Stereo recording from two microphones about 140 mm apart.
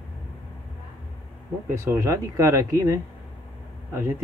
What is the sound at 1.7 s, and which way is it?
Speech, 20° right (ahead or behind).